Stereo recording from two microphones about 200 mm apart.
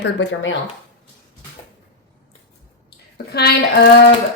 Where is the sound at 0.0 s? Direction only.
65° left (ahead or behind).